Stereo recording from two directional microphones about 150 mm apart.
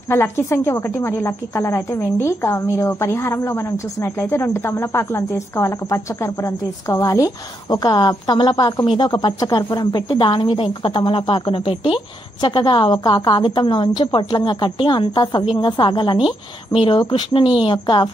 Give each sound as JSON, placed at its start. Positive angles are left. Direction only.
{"t": 0.1, "sound": "a woman's voice", "side_deg": 15}